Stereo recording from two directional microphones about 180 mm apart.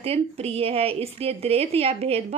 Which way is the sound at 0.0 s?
35° right (ahead or behind).